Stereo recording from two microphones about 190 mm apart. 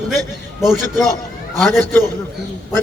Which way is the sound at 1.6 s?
Centre (ahead or behind).